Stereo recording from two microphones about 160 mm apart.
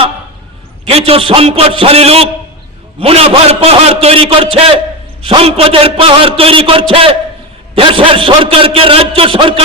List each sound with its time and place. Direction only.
0.9 s a man's voice: 35° right (ahead or behind)